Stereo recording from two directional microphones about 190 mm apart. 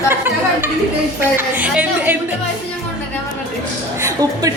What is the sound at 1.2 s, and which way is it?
Speech, 10° right (ahead or behind).